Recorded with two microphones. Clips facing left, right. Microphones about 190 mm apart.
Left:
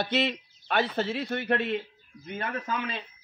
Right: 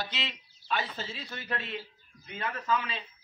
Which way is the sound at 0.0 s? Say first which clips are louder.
Left 11 dB; 60° left (ahead or behind).